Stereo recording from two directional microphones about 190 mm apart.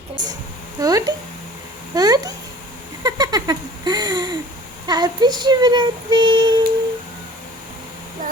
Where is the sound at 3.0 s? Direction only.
20° right (ahead or behind).